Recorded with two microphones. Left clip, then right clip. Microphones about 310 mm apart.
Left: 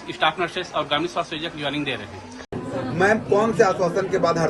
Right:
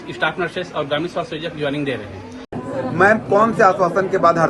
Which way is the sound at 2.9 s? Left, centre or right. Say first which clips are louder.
Right 5 dB; centre.